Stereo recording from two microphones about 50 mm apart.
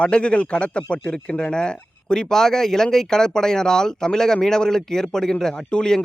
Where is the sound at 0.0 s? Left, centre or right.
Left.